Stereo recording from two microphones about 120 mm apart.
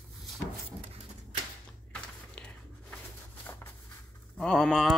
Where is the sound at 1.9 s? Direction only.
10° left (ahead or behind).